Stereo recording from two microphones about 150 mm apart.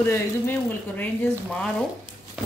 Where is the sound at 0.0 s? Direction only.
15° left (ahead or behind).